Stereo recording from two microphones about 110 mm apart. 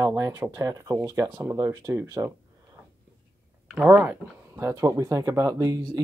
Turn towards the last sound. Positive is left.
turn(degrees=-30)  # may be behind; listen again after turning